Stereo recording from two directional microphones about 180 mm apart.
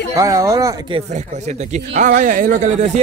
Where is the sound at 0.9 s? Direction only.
40° right (ahead or behind).